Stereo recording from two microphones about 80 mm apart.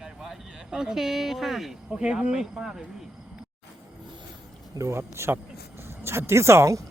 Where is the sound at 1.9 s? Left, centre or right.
Centre.